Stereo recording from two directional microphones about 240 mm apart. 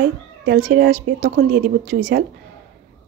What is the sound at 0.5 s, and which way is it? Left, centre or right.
A woman's voice, right.